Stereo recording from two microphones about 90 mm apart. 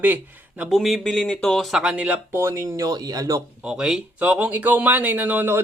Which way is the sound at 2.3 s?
30° right (ahead or behind).